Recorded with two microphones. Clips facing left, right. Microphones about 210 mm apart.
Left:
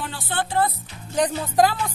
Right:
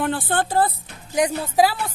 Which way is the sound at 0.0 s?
50° right (ahead or behind).